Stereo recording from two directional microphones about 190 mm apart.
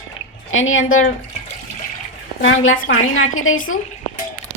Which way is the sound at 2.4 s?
85° left.